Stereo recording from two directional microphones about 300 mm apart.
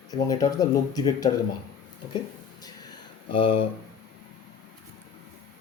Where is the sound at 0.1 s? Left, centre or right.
Centre.